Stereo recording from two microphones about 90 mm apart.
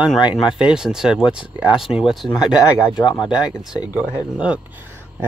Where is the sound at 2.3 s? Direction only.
50° left (ahead or behind).